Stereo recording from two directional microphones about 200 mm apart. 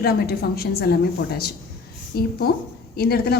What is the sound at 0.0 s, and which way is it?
Speech, 50° left (ahead or behind).